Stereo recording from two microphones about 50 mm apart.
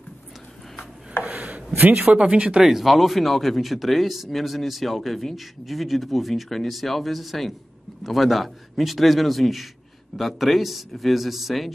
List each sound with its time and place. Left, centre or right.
1.2 s a sound: right
2.0 s speech: centre
2.6 s speech: centre